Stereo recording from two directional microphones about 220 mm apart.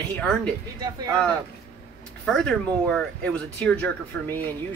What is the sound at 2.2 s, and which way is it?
Speech, 5° left (ahead or behind).